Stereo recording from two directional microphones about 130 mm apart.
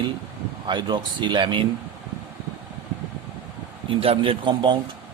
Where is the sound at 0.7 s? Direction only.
35° right (ahead or behind).